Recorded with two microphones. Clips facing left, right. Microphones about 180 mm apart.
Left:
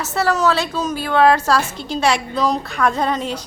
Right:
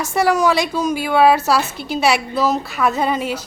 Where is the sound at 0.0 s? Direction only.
10° right (ahead or behind).